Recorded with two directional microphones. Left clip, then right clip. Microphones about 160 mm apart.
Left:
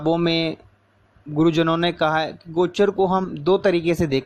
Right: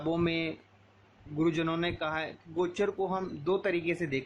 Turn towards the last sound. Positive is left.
turn(degrees=50)  # may be behind; listen again after turning